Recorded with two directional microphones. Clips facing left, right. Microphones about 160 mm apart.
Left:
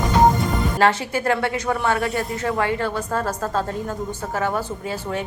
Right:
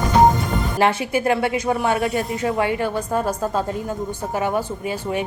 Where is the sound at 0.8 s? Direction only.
15° right (ahead or behind).